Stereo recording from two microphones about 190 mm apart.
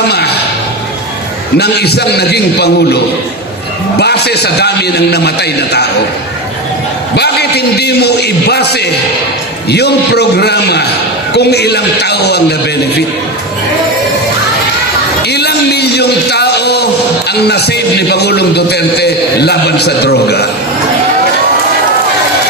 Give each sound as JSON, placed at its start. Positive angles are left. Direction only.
{"t": 0.1, "sound": "a sound", "side_deg": 60}
{"t": 1.6, "sound": "a man's voice", "side_deg": 60}
{"t": 4.0, "sound": "a man's voice", "side_deg": 60}
{"t": 7.2, "sound": "a man's voice", "side_deg": 60}
{"t": 15.2, "sound": "a sound", "side_deg": 60}
{"t": 17.3, "sound": "a man's voice", "side_deg": 60}